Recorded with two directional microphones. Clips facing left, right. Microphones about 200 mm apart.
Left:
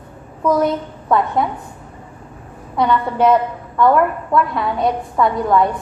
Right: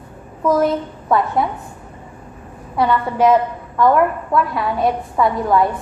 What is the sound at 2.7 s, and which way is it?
A woman's voice, 5° right (ahead or behind).